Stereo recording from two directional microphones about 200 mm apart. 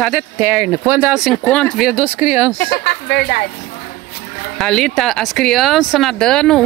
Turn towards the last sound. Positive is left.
turn(degrees=5)  # may be behind; listen again after turning